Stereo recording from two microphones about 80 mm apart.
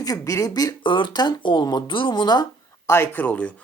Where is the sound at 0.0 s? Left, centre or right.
Left.